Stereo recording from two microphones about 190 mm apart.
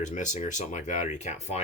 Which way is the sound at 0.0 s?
40° left (ahead or behind).